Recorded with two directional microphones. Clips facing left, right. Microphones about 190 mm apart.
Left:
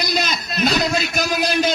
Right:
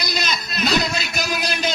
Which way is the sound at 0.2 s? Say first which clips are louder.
Left 2 dB; 45° left (ahead or behind).